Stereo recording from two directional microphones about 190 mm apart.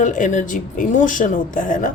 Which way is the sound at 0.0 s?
40° left (ahead or behind).